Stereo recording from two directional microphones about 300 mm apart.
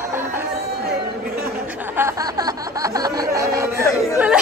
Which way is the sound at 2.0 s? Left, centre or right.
Centre.